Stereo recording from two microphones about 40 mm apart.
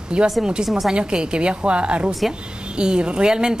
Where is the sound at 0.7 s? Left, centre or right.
Centre.